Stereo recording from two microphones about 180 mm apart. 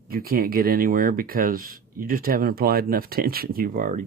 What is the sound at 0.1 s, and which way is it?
Speech, 55° right (ahead or behind).